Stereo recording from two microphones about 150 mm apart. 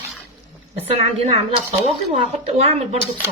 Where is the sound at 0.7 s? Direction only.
40° right (ahead or behind).